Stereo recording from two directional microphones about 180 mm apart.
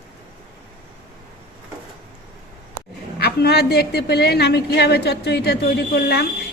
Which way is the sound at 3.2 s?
60° left (ahead or behind).